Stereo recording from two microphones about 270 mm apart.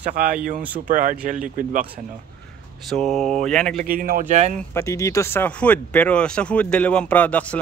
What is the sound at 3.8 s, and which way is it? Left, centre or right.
Speech, right.